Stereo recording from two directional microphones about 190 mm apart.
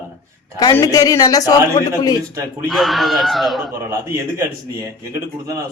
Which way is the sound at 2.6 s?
Centre (ahead or behind).